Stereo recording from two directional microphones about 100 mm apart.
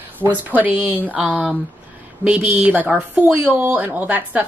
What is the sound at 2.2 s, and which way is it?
Speech, 15° right (ahead or behind).